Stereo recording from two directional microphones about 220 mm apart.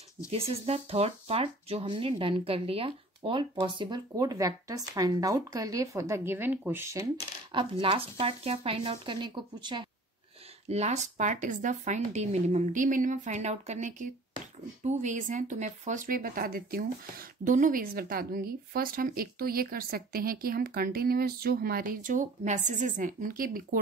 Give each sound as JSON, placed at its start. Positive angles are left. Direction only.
{"t": 0.3, "sound": "speech", "side_deg": -30}
{"t": 7.8, "sound": "speech", "side_deg": -25}
{"t": 10.7, "sound": "speech", "side_deg": -30}